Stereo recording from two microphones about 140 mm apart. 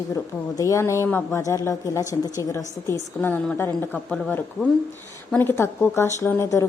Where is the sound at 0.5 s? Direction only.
25° left (ahead or behind).